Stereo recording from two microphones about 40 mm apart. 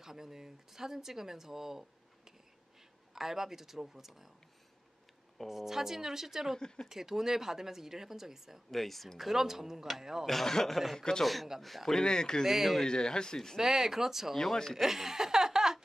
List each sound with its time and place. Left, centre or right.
0.0 s speech: centre
5.5 s speech: centre
8.6 s speech: centre
9.3 s speech: centre
10.2 s speech: centre
11.6 s speech: centre
11.9 s speech: centre
12.4 s speech: centre
12.8 s speech: centre
13.6 s speech: centre
14.3 s speech: centre
14.8 s a sound: centre